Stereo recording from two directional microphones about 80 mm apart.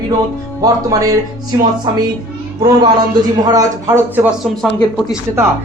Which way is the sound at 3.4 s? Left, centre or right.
Right.